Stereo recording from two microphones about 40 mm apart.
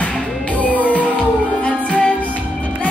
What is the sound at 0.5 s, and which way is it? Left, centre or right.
Music, left.